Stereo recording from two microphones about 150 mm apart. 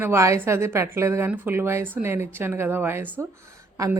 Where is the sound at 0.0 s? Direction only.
15° right (ahead or behind).